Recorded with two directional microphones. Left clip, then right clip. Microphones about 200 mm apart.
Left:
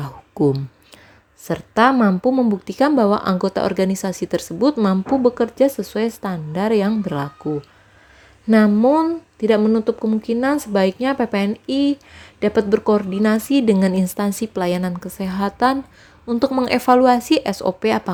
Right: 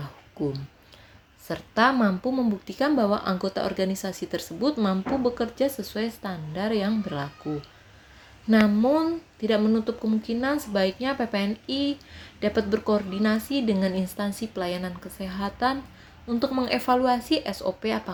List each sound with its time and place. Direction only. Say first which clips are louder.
0.0 s a sound: left 12 dB; 50° left (ahead or behind)
1.5 s speech: left 7 dB; 45° left (ahead or behind)
8.4 s speech: left 7 dB; 45° left (ahead or behind)